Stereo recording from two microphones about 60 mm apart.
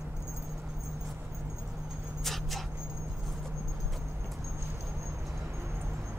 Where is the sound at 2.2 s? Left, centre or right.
Centre.